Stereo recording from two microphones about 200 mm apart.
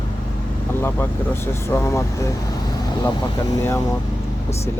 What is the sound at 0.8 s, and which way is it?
Speech, 10° left (ahead or behind).